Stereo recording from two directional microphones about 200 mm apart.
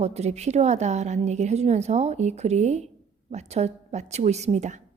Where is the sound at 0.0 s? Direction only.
35° right (ahead or behind).